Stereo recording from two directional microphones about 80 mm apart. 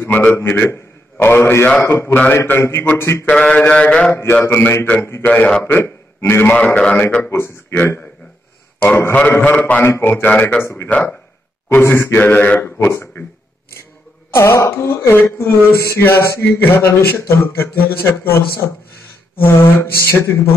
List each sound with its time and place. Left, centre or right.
0.1 s a man's voice: left
3.3 s mantra: centre
4.1 s a man's voice: left
5.2 s mantra: centre
5.6 s a man's voice: left
7.2 s a man's voice: left
10.3 s mantra: centre
10.6 s a man's voice: left
12.5 s speech: left
14.3 s speech: left
19.4 s a man's voice: left